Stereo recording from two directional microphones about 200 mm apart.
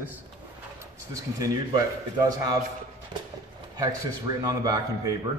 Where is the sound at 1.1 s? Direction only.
15° right (ahead or behind).